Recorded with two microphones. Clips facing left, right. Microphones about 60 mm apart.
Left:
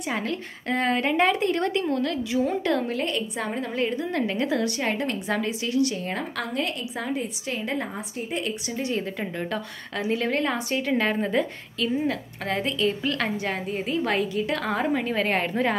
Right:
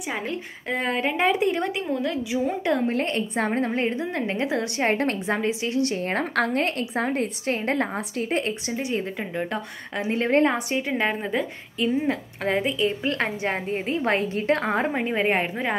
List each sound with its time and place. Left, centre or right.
0.7 s speech: centre
2.9 s a woman's voice: right
8.5 s a woman's voice: right
9.5 s a woman's voice: right
10.7 s speech: centre
11.1 s speech: centre
11.8 s a woman's voice: right